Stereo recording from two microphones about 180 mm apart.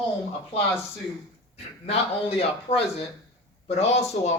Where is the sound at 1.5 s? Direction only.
35° left (ahead or behind).